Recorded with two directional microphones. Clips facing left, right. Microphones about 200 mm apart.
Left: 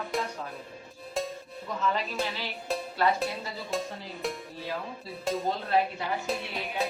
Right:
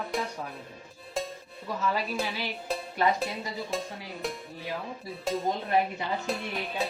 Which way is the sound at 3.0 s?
15° right (ahead or behind).